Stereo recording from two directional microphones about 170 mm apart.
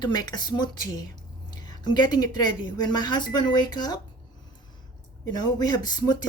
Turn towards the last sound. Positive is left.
turn(degrees=25)  # may be behind; listen again after turning